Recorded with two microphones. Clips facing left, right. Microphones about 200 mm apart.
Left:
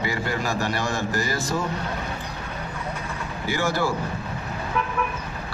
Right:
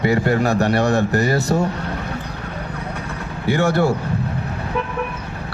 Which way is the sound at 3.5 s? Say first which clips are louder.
Right 7 dB; 65° right (ahead or behind).